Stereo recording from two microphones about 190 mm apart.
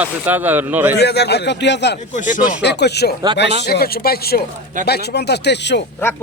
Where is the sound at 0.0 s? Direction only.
10° right (ahead or behind).